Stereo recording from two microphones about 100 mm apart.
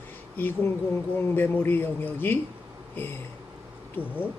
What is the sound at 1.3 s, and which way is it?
Speech, 20° left (ahead or behind).